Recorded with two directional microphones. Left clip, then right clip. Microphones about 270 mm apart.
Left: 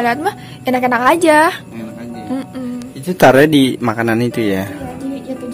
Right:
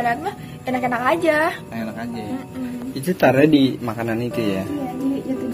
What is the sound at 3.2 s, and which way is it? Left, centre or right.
Speech, left.